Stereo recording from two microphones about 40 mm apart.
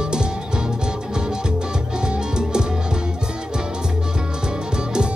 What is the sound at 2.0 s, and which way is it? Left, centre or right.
Music, centre.